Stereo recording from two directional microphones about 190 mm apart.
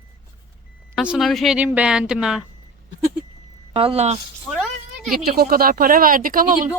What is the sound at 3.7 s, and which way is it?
Speech, 30° right (ahead or behind).